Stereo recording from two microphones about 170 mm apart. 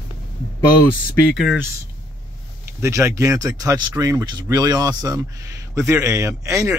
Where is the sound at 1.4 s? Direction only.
5° right (ahead or behind).